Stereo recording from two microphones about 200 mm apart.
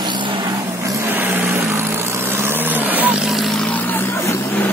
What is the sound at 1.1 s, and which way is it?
Vehicle, 10° right (ahead or behind).